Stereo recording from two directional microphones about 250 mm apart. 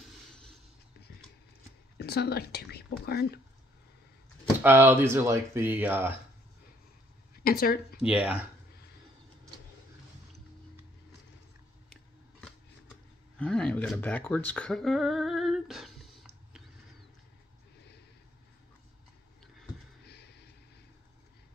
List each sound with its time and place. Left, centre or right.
0.3 s a sound: centre
2.0 s speech: left
4.6 s speech: centre
7.4 s speech: left
8.0 s speech: centre
13.4 s speech: centre
20.1 s vehicle: left